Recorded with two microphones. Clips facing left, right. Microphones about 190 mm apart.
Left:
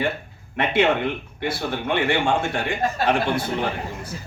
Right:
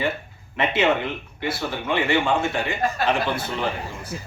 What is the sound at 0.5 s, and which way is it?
Speech, 55° left (ahead or behind).